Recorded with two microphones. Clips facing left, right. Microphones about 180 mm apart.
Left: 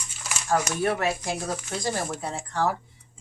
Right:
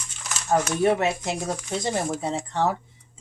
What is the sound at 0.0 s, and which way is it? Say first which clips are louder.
Crumpling: even; 10° left (ahead or behind).